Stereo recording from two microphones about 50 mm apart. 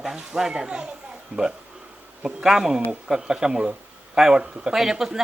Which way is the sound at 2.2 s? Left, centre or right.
Centre.